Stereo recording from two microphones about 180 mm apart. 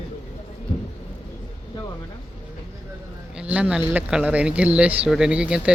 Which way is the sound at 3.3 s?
5° right (ahead or behind).